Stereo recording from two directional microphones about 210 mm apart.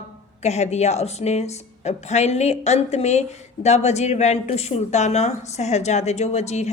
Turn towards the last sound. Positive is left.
turn(degrees=30)  # may be behind; listen again after turning